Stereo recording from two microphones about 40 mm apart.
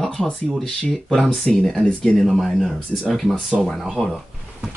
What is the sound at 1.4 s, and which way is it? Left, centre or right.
Speech, left.